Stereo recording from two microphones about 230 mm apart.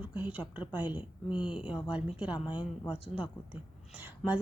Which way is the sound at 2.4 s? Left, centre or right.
Left.